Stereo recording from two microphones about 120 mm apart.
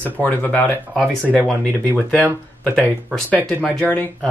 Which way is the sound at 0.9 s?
Centre (ahead or behind).